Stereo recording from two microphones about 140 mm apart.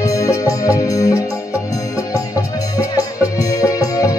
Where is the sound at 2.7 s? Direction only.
25° left (ahead or behind).